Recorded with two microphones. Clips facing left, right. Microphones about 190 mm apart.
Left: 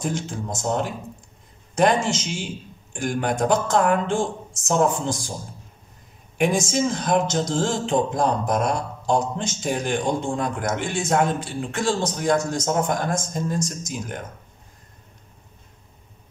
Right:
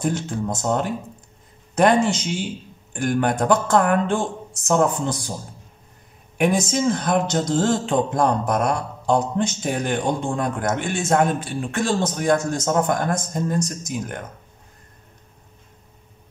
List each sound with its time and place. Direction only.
0.0 s speech: 60° right (ahead or behind)
6.4 s speech: 55° right (ahead or behind)